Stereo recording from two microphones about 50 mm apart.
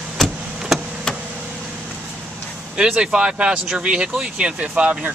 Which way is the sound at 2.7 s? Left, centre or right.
Centre.